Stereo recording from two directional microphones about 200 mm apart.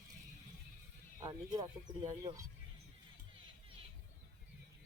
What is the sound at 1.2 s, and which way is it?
Speech, 20° right (ahead or behind).